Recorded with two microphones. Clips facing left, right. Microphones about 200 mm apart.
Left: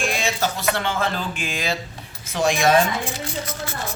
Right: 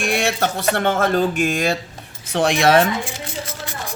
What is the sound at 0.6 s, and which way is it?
Speech, 50° right (ahead or behind).